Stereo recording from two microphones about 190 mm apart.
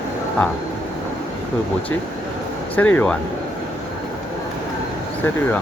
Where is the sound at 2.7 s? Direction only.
10° left (ahead or behind).